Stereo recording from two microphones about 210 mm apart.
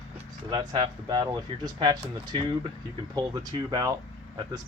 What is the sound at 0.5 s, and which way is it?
Speech, 20° right (ahead or behind).